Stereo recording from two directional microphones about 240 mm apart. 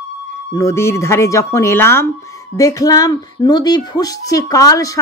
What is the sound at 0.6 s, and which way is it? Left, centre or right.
Speech, centre.